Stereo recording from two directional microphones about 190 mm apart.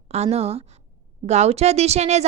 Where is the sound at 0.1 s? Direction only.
35° right (ahead or behind).